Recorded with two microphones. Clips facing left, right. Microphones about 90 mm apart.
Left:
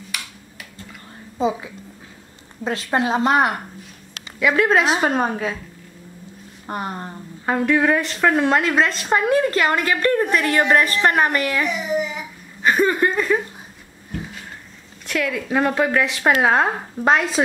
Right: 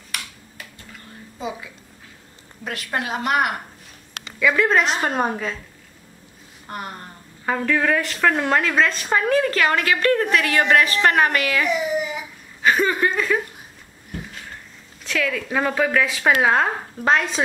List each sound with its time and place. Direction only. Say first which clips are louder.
1.4 s a woman's voice: left 9 dB; 25° left (ahead or behind)
4.4 s a woman's voice: left 1 dB; 10° left (ahead or behind)
6.7 s a woman's voice: left 5 dB; 25° left (ahead or behind)
7.4 s a woman's voice: left 3 dB; 15° left (ahead or behind)
8.2 s a woman's voice: left 2 dB; 5° left (ahead or behind)
15.2 s a woman's voice: left 3 dB; 10° left (ahead or behind)
15.9 s a woman's voice: left 1 dB; 20° left (ahead or behind)
16.3 s a woman's voice: left 2 dB; 5° left (ahead or behind)